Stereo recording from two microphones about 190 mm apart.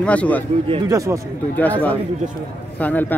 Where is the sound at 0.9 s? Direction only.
15° right (ahead or behind).